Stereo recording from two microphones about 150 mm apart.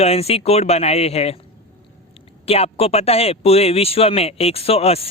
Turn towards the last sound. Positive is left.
turn(degrees=40)  # may be behind; listen again after turning